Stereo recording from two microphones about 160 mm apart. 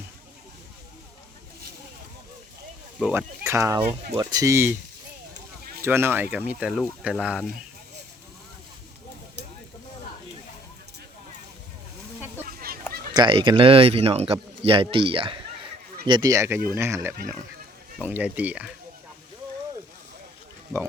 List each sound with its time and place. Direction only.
3.0 s speech: 10° right (ahead or behind)
5.8 s speech: 15° right (ahead or behind)
12.5 s a sound: 70° right (ahead or behind)
13.1 s speech: 30° right (ahead or behind); by 18.7 s 10° right (ahead or behind)